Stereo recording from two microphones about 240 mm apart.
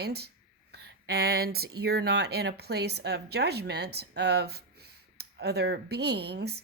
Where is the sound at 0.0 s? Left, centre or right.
Right.